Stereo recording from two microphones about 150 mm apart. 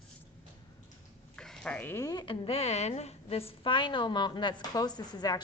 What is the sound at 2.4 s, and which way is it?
A woman's voice, 45° left (ahead or behind).